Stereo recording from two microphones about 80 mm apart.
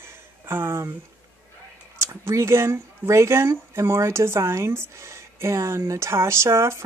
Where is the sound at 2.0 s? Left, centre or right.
Right.